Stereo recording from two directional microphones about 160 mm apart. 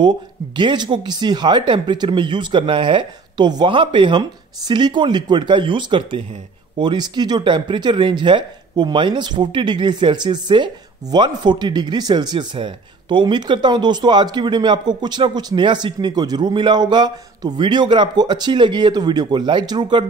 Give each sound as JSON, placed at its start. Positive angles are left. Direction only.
{"t": 0.6, "sound": "speech", "side_deg": -30}